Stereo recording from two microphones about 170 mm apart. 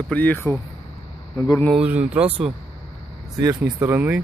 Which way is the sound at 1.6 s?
5° right (ahead or behind).